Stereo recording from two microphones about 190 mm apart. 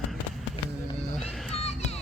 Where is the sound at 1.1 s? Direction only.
Centre (ahead or behind).